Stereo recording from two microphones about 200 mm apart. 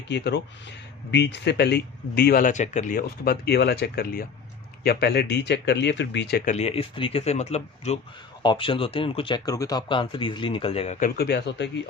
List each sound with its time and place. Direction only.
0.1 s speech: 60° left (ahead or behind); by 10.9 s 30° left (ahead or behind)
11.0 s speech: 50° left (ahead or behind)